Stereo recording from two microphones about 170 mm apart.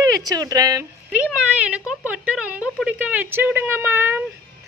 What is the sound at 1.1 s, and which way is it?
Speech, 5° right (ahead or behind).